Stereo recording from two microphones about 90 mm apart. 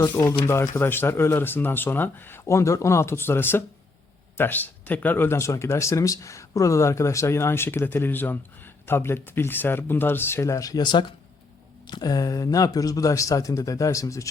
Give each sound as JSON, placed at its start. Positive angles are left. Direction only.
{"t": 0.0, "sound": "speech", "side_deg": 35}
{"t": 0.8, "sound": "speech", "side_deg": 25}